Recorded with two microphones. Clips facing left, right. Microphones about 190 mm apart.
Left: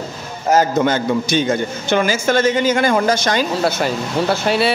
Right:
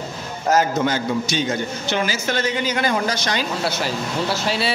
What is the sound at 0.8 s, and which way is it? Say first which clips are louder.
A man's voice: left 4 dB; 50° left (ahead or behind).